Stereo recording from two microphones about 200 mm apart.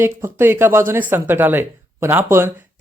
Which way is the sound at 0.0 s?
10° right (ahead or behind).